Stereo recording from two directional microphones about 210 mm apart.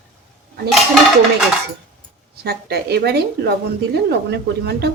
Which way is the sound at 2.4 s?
50° right (ahead or behind).